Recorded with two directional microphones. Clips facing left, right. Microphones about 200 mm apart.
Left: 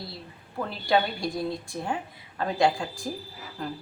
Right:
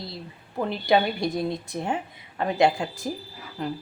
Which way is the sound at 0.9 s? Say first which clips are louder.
Right 3 dB; 20° right (ahead or behind).